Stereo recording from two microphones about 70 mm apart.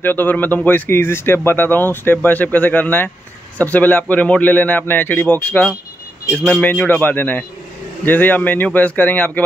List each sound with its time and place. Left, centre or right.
0.0 s speech: left